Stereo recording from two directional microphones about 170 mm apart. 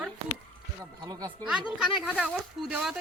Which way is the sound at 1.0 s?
20° right (ahead or behind).